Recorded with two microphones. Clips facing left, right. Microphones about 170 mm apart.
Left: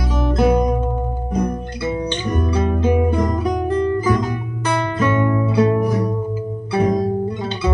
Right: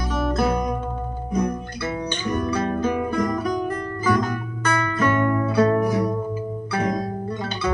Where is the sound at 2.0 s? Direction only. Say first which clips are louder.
Left 3 dB; 20° left (ahead or behind).